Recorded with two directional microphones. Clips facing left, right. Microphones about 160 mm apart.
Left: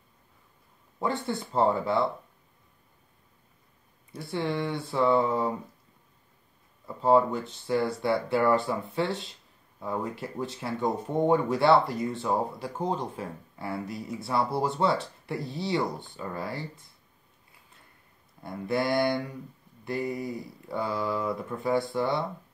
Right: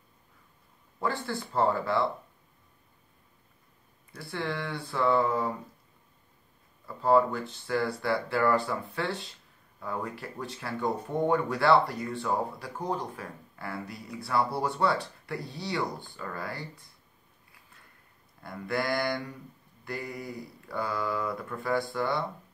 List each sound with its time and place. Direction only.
0.9 s speech: 20° left (ahead or behind)
4.1 s speech: 20° left (ahead or behind)
6.9 s speech: 20° left (ahead or behind)
18.4 s speech: 20° left (ahead or behind)